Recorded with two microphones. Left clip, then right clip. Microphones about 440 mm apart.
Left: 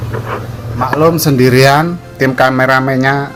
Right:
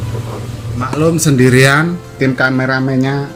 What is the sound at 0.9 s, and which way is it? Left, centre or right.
Speech, centre.